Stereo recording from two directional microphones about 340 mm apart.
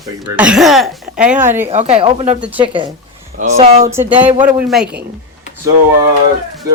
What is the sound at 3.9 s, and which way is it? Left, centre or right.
Speech, centre.